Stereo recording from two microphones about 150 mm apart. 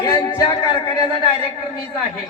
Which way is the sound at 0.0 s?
20° left (ahead or behind).